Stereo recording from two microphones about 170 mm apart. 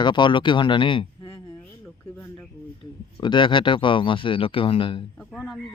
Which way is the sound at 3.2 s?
25° left (ahead or behind).